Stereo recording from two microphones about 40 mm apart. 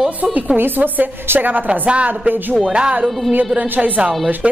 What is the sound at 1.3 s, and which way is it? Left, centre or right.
Speech, right.